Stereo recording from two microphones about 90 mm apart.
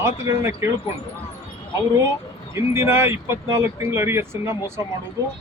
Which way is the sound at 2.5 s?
30° right (ahead or behind).